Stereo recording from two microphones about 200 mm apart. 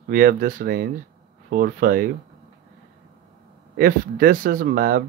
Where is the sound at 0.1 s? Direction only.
45° right (ahead or behind).